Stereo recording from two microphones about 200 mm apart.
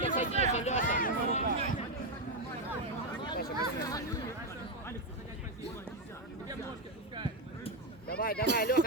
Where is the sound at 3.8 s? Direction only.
15° left (ahead or behind).